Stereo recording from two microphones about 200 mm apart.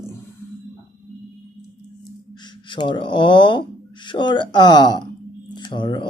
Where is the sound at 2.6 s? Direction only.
25° left (ahead or behind).